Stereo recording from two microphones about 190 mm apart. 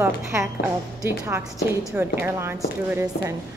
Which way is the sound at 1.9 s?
15° right (ahead or behind).